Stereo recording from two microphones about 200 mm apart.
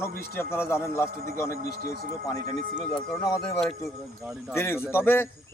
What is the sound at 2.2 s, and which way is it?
A man's voice, 20° left (ahead or behind).